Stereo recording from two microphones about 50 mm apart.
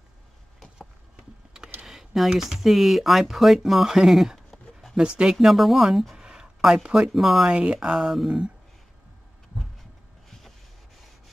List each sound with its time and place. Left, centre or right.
1.5 s a sound: centre
1.9 s speech: centre
4.9 s speech: centre
5.5 s speech: centre
6.1 s a sound: centre
6.6 s speech: centre
7.4 s speech: centre
8.0 s speech: centre